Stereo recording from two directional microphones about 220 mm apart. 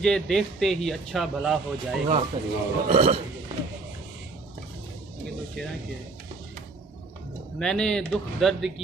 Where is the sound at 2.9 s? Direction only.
25° right (ahead or behind).